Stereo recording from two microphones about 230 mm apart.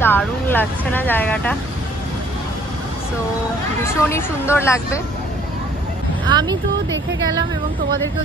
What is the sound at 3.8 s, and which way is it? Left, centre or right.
Speech, centre.